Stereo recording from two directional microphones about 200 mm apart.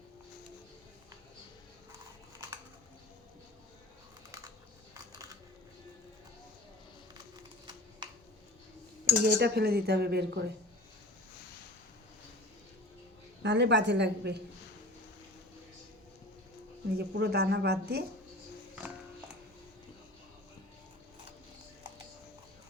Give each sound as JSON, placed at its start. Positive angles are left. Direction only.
{"t": 7.7, "sound": "a sound", "side_deg": -20}
{"t": 9.0, "sound": "cutlery", "side_deg": -50}
{"t": 13.4, "sound": "a woman's voice", "side_deg": -60}
{"t": 17.0, "sound": "cutlery", "side_deg": -55}